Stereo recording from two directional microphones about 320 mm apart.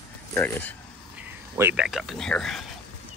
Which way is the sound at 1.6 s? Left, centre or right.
Centre.